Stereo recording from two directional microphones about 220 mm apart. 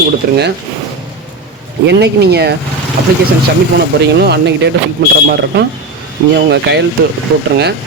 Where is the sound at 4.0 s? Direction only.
50° right (ahead or behind).